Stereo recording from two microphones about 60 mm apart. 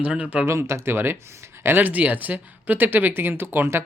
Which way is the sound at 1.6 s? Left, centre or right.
Right.